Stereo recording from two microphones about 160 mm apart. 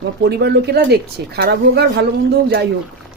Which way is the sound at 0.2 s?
90° right.